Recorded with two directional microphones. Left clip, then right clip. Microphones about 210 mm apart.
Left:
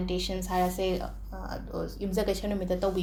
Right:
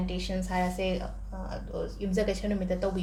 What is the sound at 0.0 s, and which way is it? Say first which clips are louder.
A woman's voice: left 2 dB; 30° left (ahead or behind).